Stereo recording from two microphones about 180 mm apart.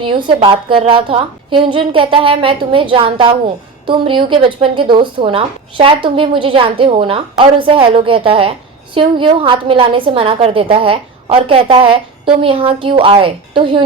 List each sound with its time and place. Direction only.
0.0 s a woman's voice: 30° right (ahead or behind)